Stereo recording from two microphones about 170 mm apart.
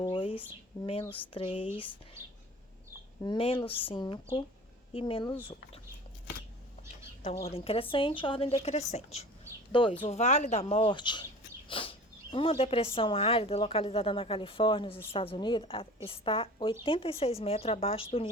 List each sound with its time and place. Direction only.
0.1 s a sound: 30° left (ahead or behind)
1.0 s speech: 30° left (ahead or behind)
3.2 s speech: 30° left (ahead or behind)
7.5 s speech: 35° left (ahead or behind)